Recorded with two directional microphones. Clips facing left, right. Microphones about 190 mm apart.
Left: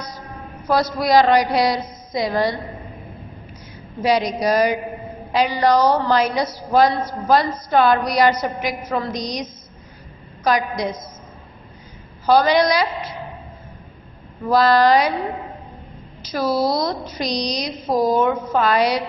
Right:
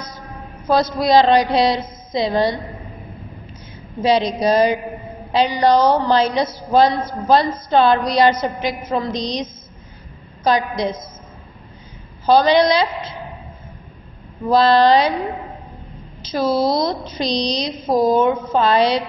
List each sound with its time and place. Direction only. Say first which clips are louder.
0.7 s a woman's voice: right 2 dB; 20° right (ahead or behind)
4.0 s a woman's voice: right 2 dB; 25° right (ahead or behind)
12.3 s a woman's voice: right 2 dB; 25° right (ahead or behind)
14.4 s a woman's voice: right 2 dB; 25° right (ahead or behind)
16.4 s a woman's voice: right 2 dB; centre (ahead or behind)
16.7 s a woman's voice: right 2 dB; 25° right (ahead or behind)